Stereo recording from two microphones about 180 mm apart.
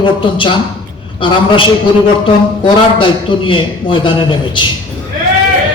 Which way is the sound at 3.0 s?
30° left (ahead or behind).